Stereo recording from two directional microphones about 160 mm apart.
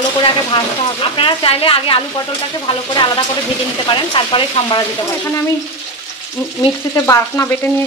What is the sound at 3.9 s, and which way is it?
Speech, 30° left (ahead or behind).